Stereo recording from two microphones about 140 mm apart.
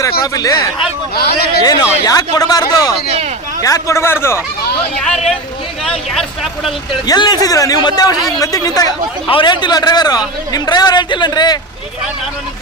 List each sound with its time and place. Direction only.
0.2 s a man's voice: 25° left (ahead or behind)
1.1 s speech: 90° left
1.6 s a man's voice: 25° left (ahead or behind)
6.1 s vehicle: centre (ahead or behind)
7.1 s a man's voice: 30° left (ahead or behind)